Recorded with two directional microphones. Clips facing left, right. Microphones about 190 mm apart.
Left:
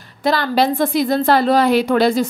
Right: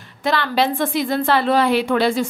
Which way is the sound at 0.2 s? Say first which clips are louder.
Left 3 dB; 40° left (ahead or behind).